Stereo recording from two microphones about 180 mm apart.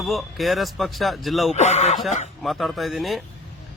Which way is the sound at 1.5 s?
40° left (ahead or behind).